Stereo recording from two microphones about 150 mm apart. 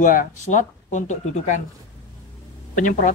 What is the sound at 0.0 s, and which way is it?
Speech, 65° left (ahead or behind).